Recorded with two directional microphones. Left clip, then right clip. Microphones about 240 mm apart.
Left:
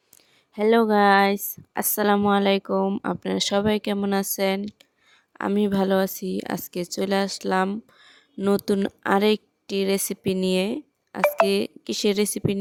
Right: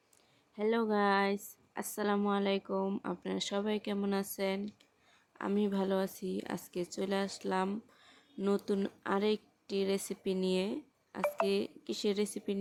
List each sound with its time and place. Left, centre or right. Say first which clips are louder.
0.5 s speech: left 13 dB; left